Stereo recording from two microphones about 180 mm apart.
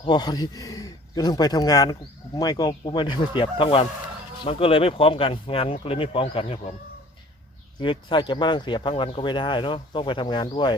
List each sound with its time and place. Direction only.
0.0 s speech: 25° left (ahead or behind)
7.8 s speech: 25° left (ahead or behind)